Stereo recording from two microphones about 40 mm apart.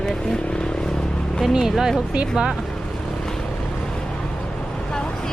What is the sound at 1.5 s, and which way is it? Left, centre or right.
Speech, centre.